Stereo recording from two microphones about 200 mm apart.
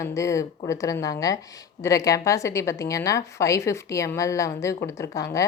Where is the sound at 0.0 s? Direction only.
15° left (ahead or behind).